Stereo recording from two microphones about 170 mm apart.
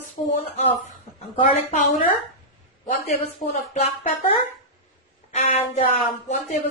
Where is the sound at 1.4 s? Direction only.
40° left (ahead or behind).